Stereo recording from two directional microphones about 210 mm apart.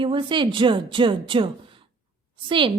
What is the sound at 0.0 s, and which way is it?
A woman's voice, 25° right (ahead or behind).